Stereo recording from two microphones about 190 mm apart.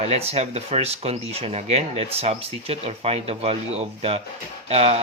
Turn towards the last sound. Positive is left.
turn(degrees=-35)  # may be behind; listen again after turning